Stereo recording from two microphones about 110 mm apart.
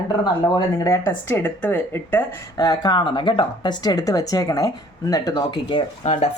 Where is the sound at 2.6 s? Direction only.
35° left (ahead or behind).